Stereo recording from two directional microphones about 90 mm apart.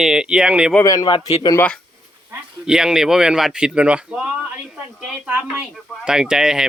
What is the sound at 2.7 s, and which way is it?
Speech, 5° right (ahead or behind).